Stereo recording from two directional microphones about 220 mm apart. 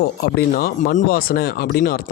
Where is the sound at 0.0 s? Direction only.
45° left (ahead or behind).